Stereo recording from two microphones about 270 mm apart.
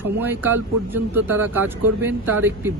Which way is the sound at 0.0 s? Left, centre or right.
Centre.